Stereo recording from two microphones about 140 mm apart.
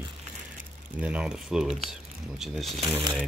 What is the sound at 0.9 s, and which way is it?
Speech, 10° right (ahead or behind).